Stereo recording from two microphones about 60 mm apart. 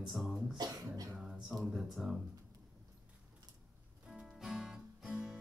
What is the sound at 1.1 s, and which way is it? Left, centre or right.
Music, centre.